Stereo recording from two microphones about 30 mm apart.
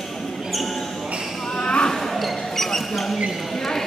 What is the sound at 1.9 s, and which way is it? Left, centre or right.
Basketball bounce, centre.